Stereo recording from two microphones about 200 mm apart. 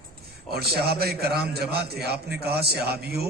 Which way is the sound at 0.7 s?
50° right (ahead or behind).